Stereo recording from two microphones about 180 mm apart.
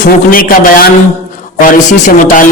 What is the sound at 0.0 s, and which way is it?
A man's voice, 50° left (ahead or behind).